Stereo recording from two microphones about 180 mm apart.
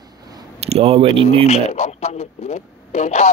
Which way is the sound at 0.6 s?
35° right (ahead or behind).